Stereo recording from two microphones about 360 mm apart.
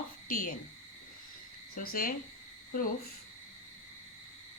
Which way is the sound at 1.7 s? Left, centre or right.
Left.